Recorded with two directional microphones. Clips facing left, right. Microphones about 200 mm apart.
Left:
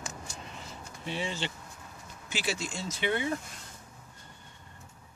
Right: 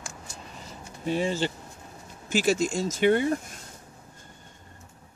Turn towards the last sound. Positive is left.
turn(degrees=-45)  # may be behind; listen again after turning